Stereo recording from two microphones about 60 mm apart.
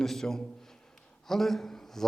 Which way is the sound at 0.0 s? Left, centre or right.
Centre.